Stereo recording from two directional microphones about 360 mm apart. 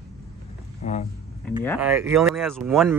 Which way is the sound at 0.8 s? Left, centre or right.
Centre.